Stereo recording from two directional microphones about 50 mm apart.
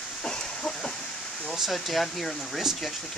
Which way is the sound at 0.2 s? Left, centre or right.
Centre.